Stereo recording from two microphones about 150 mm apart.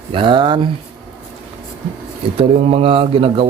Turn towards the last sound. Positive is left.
turn(degrees=-40)  # may be behind; listen again after turning